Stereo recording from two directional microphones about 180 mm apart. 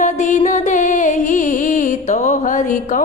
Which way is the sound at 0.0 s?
40° left (ahead or behind).